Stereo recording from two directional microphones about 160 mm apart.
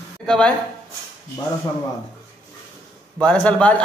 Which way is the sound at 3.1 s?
10° left (ahead or behind).